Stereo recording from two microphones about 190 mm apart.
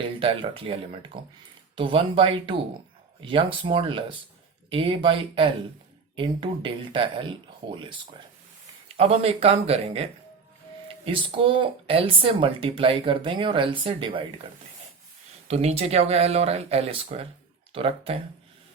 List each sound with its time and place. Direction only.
0.2 s speech: 30° right (ahead or behind)
1.7 s speech: 25° right (ahead or behind)
9.0 s speech: 30° right (ahead or behind)
15.4 s speech: 35° right (ahead or behind)